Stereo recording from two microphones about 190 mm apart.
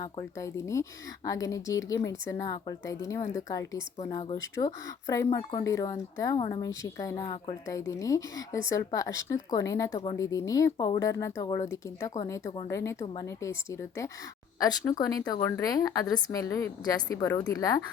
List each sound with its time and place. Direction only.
0.0 s speech: 15° left (ahead or behind)
9.9 s a woman's voice: 30° left (ahead or behind)
10.2 s a woman's voice: 15° left (ahead or behind)